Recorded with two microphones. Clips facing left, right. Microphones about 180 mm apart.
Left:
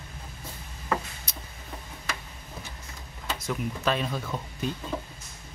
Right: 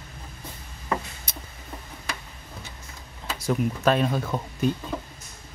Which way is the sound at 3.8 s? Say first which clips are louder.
Right 6 dB; 50° right (ahead or behind).